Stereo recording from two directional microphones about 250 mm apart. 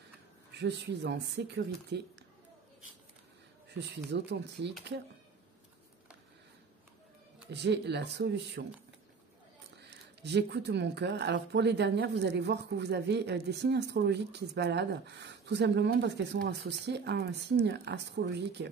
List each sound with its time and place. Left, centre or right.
0.6 s speech: right
3.7 s speech: right
7.5 s speech: right
9.8 s speech: right